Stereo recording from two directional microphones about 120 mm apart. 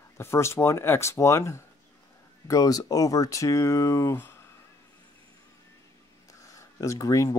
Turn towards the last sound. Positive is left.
turn(degrees=25)  # may be behind; listen again after turning